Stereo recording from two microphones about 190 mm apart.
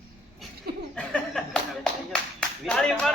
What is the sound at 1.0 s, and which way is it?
A man's voice, 5° left (ahead or behind).